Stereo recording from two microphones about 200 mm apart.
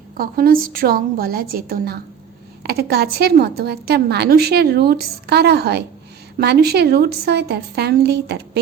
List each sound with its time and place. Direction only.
0.2 s a woman's voice: 45° right (ahead or behind)